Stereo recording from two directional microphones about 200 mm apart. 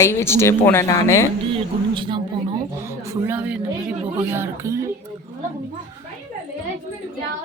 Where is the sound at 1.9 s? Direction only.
25° right (ahead or behind).